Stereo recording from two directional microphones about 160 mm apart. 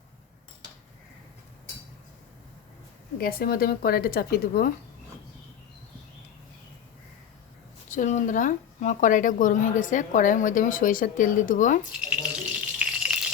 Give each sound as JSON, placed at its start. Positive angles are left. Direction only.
{"t": 3.2, "sound": "a woman's voice", "side_deg": 70}
{"t": 7.9, "sound": "a woman's voice", "side_deg": 50}
{"t": 11.9, "sound": "rattle", "side_deg": -5}